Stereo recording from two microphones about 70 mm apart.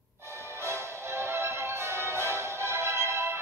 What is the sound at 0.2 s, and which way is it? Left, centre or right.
Music, right.